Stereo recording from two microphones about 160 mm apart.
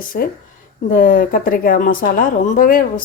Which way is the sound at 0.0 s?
60° left (ahead or behind).